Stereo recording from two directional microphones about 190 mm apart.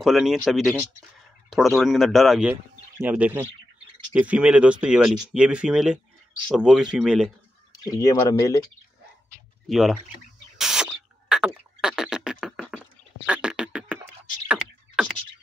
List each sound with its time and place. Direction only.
0.0 s speech: centre (ahead or behind)
8.0 s speech: 20° left (ahead or behind)
9.7 s speech: centre (ahead or behind)
10.6 s beatboxing: centre (ahead or behind)